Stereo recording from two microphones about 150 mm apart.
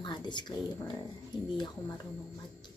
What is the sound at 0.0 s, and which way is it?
Speech, 30° left (ahead or behind).